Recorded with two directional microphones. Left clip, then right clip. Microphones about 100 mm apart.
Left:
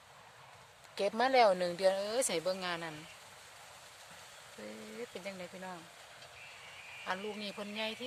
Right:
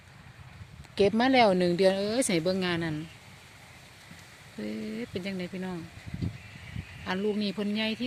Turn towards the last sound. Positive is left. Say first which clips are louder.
# right 8 dB
turn(degrees=-15)  # may be behind; listen again after turning